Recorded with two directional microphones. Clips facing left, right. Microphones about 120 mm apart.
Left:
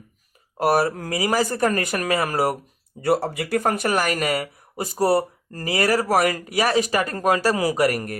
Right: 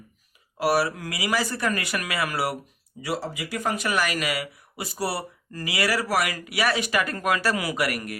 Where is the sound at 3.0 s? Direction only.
55° left (ahead or behind); by 8.1 s 40° left (ahead or behind).